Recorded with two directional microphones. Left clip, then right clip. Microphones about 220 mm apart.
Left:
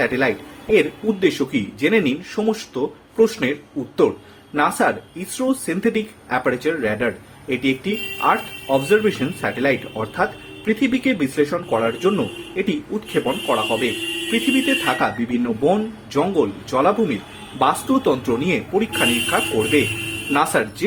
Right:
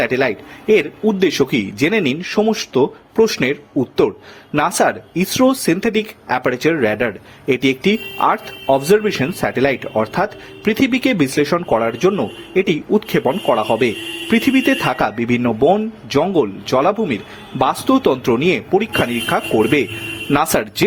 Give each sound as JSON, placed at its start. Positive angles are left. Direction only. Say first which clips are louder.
{"t": 0.0, "sound": "speech", "louder": "right 2 dB", "side_deg": -45}
{"t": 4.5, "sound": "speech", "louder": "right 3 dB", "side_deg": -50}
{"t": 10.8, "sound": "speech", "louder": "right 5 dB", "side_deg": -45}